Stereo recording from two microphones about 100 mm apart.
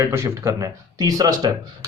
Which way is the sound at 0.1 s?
30° right (ahead or behind).